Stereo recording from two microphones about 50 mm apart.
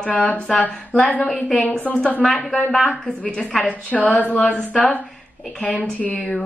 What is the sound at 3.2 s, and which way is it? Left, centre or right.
A woman's voice, left.